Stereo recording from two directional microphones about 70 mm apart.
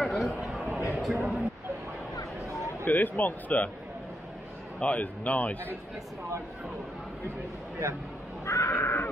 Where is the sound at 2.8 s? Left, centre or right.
Left.